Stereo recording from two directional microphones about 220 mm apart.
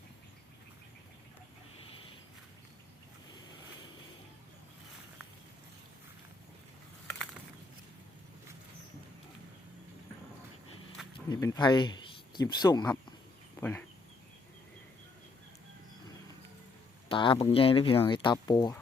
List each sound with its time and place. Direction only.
11.3 s speech: 15° left (ahead or behind)
17.1 s speech: 25° left (ahead or behind)